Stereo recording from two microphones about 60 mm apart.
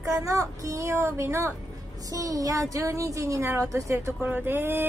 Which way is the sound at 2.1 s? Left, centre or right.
Right.